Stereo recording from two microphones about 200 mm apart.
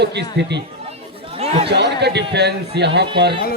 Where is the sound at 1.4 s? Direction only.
30° right (ahead or behind).